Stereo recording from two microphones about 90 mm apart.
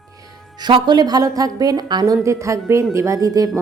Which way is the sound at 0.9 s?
50° right (ahead or behind).